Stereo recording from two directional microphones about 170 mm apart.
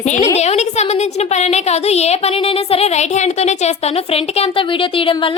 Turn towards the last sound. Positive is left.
turn(degrees=30)  # may be behind; listen again after turning